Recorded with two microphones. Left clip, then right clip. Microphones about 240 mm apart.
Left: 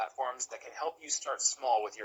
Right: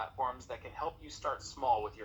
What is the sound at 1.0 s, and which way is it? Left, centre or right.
Speech, left.